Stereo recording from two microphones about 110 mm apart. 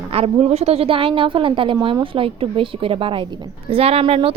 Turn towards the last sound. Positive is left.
turn(degrees=-55)  # may be behind; listen again after turning